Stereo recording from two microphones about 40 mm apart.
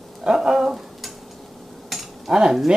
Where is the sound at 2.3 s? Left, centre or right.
Centre.